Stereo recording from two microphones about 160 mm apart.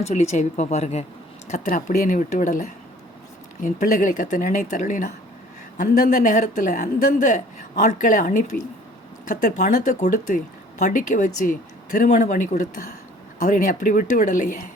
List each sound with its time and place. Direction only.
0.0 s speech: 45° left (ahead or behind)